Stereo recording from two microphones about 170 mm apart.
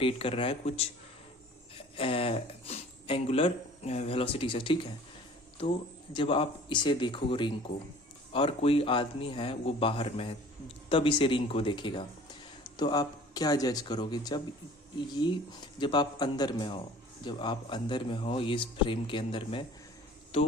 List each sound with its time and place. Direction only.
0.0 s speech: 30° left (ahead or behind)